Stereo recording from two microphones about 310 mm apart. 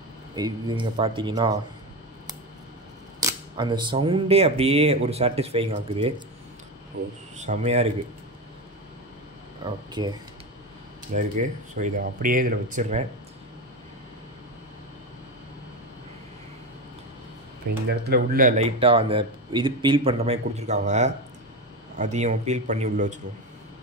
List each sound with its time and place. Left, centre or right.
0.4 s speech: centre
3.2 s speech: centre
7.3 s speech: right
10.0 s speech: centre
11.1 s speech: right
17.8 s speech: right